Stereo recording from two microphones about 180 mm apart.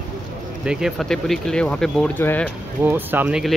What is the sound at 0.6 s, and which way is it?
Speech, 5° right (ahead or behind).